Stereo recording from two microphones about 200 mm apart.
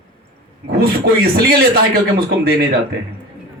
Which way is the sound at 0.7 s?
50° right (ahead or behind).